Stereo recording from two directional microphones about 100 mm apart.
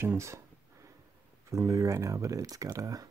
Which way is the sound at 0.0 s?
25° right (ahead or behind).